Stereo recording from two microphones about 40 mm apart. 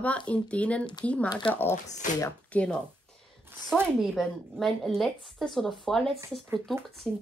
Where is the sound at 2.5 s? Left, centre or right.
Left.